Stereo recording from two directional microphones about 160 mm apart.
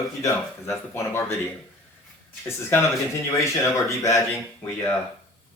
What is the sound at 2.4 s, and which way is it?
Speech, 15° left (ahead or behind).